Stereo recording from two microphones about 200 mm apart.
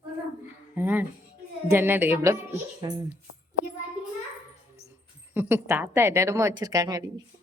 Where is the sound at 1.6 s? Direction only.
10° right (ahead or behind).